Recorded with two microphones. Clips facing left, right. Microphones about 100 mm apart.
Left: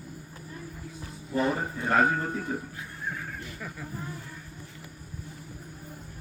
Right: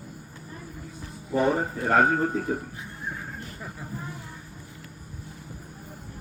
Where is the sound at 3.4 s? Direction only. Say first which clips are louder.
Even; 35° right (ahead or behind).